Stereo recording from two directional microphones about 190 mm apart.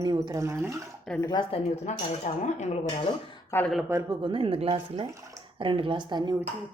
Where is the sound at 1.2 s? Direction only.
25° left (ahead or behind).